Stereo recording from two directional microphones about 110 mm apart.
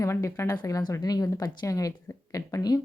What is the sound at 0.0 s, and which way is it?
Speech, 30° left (ahead or behind).